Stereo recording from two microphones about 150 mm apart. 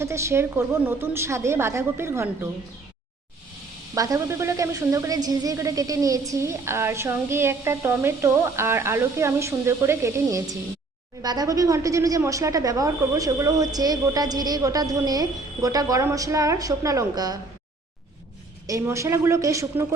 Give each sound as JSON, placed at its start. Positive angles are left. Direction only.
{"t": 0.0, "sound": "a woman's voice", "side_deg": -20}
{"t": 3.9, "sound": "a woman's voice", "side_deg": -25}
{"t": 18.7, "sound": "a woman's voice", "side_deg": -20}